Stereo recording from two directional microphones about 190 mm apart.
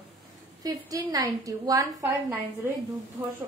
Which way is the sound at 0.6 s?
20° right (ahead or behind).